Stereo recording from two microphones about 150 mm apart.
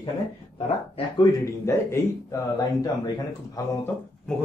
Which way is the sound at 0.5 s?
40° left (ahead or behind).